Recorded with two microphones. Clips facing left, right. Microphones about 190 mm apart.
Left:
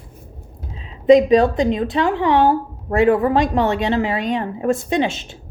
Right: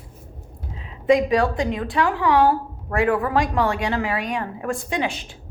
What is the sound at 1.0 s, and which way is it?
Speech, 20° left (ahead or behind).